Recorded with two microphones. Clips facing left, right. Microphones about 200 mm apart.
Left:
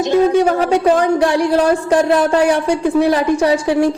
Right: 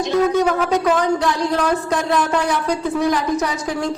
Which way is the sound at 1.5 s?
30° left (ahead or behind).